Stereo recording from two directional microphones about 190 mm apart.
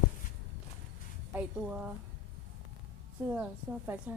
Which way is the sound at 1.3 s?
5° right (ahead or behind).